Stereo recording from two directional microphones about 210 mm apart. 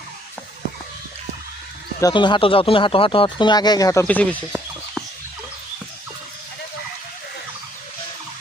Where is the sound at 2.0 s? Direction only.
20° left (ahead or behind).